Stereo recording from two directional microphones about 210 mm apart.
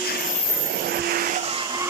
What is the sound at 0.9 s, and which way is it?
Vehicle, 45° right (ahead or behind).